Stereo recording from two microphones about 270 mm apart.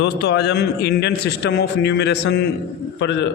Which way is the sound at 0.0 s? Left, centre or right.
Left.